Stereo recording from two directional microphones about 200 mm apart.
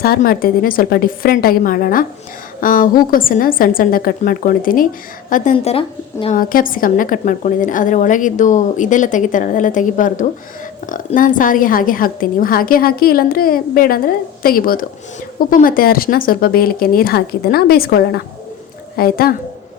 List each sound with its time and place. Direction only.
0.0 s a woman's voice: 50° left (ahead or behind); by 6.3 s 30° left (ahead or behind)
6.3 s a woman's voice: 45° left (ahead or behind)